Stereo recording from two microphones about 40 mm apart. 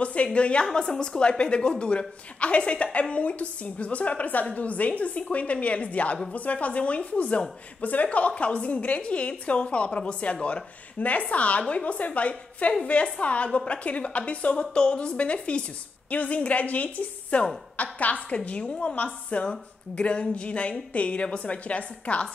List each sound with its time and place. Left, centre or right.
0.0 s a woman's voice: left